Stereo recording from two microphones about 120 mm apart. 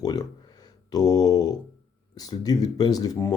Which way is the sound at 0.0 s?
35° left (ahead or behind).